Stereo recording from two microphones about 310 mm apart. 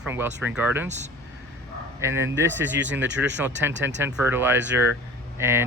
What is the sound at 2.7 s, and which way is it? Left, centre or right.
Speech, right.